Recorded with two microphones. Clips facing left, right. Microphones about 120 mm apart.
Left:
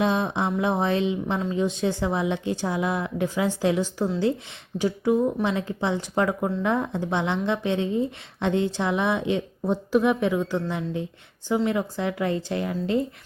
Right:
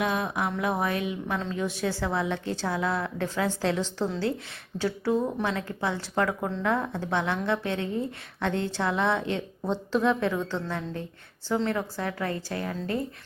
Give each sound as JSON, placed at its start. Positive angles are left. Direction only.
{"t": 0.0, "sound": "speech", "side_deg": 25}